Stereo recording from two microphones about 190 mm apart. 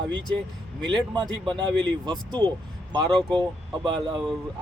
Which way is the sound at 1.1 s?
25° right (ahead or behind).